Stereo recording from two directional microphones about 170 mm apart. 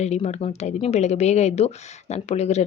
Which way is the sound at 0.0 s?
40° left (ahead or behind).